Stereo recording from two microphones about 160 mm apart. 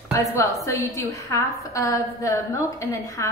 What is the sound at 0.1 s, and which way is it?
A woman's voice, 20° left (ahead or behind).